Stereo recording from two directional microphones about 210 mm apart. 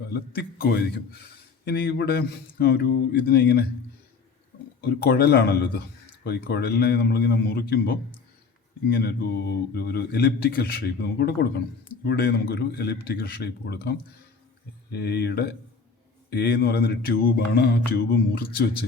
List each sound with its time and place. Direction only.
0.1 s a man's voice: 50° left (ahead or behind)
4.8 s a man's voice: 50° left (ahead or behind)
14.9 s a man's voice: 50° left (ahead or behind)